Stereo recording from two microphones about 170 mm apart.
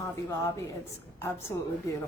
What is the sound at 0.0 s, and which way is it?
A woman's voice, 20° left (ahead or behind).